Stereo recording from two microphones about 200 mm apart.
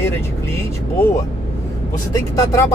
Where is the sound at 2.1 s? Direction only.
15° left (ahead or behind).